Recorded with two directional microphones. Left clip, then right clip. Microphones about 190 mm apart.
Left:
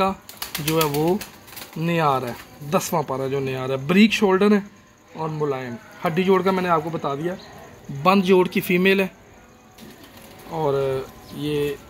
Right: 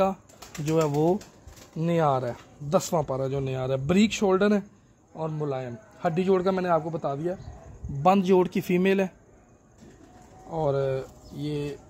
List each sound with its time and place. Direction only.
0.7 s speech: 40° right (ahead or behind)
1.8 s speech: 50° right (ahead or behind)
10.5 s speech: 55° right (ahead or behind)